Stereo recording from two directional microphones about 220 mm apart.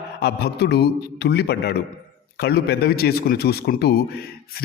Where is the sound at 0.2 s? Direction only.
45° left (ahead or behind).